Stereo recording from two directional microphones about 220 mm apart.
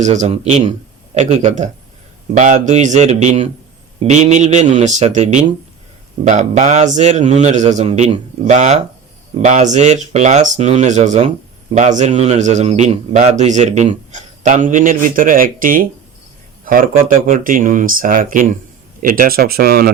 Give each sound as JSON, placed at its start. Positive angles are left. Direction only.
{"t": 0.0, "sound": "a man's voice", "side_deg": -35}